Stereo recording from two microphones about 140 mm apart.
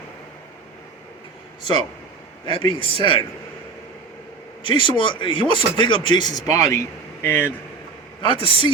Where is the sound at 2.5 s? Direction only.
40° left (ahead or behind).